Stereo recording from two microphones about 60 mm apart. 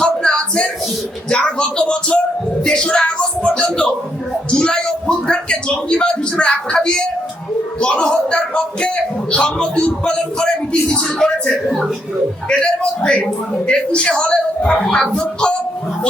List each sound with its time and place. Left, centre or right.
0.0 s a sound: centre
1.3 s speech: centre
12.5 s speech: centre